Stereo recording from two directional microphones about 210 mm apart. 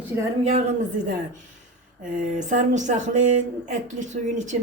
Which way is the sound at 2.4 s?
35° right (ahead or behind).